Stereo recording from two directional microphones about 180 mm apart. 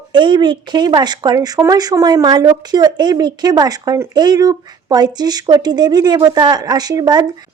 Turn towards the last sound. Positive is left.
turn(degrees=-20)  # may be behind; listen again after turning